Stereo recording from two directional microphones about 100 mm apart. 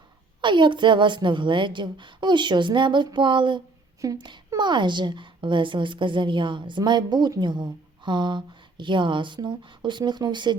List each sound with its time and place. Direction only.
0.4 s a woman's voice: 50° right (ahead or behind)